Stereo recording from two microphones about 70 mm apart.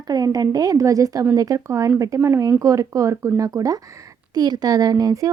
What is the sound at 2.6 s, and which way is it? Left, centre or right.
Speech, right.